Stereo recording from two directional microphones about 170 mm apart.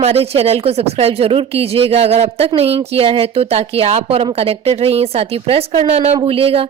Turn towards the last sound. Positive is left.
turn(degrees=-35)  # may be behind; listen again after turning